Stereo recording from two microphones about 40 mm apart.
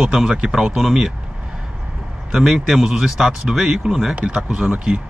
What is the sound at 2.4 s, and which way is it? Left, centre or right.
Speech, centre.